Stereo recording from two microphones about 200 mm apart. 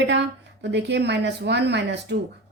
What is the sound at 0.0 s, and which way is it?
Speech, 60° right (ahead or behind).